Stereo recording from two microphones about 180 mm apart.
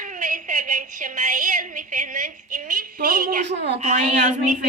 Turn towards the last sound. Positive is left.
turn(degrees=-45)  # may be behind; listen again after turning